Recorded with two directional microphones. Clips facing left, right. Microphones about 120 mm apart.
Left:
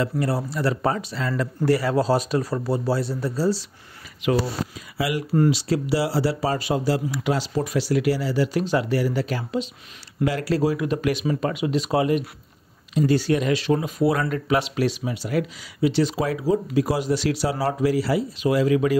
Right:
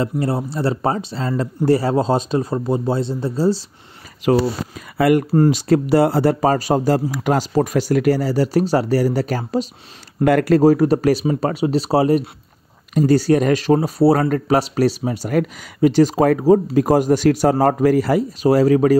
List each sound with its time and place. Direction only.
0.0 s speech: 25° right (ahead or behind)
4.2 s speech: 40° right (ahead or behind)
4.9 s speech: 50° right (ahead or behind)
10.2 s speech: 55° right (ahead or behind)